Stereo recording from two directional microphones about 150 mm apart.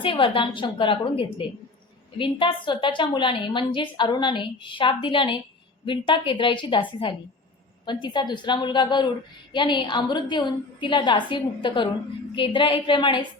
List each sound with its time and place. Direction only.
0.0 s a woman's voice: 35° left (ahead or behind)